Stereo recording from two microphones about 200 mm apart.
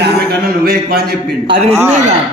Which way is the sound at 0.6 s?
50° right (ahead or behind).